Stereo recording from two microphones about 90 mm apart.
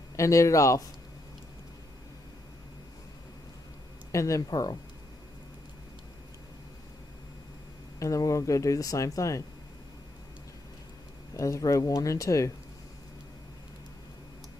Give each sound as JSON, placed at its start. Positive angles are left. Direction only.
{"t": 0.1, "sound": "speech", "side_deg": 35}
{"t": 4.1, "sound": "speech", "side_deg": 35}
{"t": 8.0, "sound": "speech", "side_deg": 35}
{"t": 11.3, "sound": "speech", "side_deg": 35}